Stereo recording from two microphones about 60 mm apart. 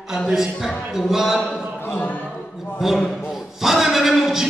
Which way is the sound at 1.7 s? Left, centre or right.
Left.